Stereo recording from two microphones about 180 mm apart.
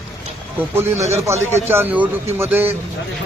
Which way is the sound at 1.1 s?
15° right (ahead or behind).